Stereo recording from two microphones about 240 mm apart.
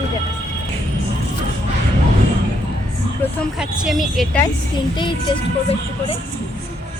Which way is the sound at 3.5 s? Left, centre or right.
Centre.